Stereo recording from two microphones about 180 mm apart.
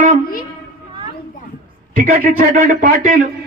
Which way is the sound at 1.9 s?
45° right (ahead or behind).